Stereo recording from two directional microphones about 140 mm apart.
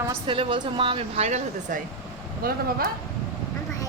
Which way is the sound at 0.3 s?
40° right (ahead or behind).